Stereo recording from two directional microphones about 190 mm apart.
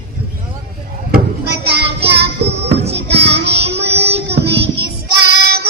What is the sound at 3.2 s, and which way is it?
Child singing, 60° right (ahead or behind).